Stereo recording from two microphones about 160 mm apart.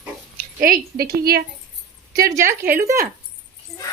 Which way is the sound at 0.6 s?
65° right (ahead or behind).